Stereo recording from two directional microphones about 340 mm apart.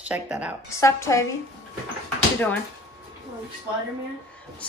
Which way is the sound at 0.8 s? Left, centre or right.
Centre.